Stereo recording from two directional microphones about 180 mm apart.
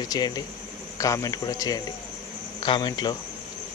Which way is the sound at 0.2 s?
25° left (ahead or behind).